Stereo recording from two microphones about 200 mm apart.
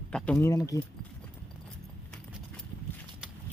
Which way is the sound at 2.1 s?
5° left (ahead or behind).